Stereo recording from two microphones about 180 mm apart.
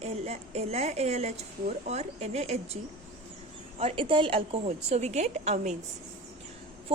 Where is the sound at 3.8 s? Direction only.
30° right (ahead or behind).